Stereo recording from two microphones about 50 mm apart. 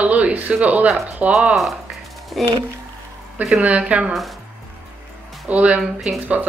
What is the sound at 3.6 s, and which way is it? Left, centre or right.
Speech, right.